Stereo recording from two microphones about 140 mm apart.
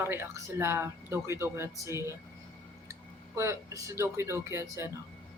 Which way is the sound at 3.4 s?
20° right (ahead or behind).